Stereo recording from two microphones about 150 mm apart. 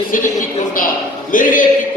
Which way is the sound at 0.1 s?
65° left (ahead or behind).